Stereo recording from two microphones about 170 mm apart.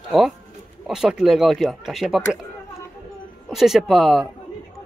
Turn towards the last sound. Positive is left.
turn(degrees=0)  # may be behind; listen again after turning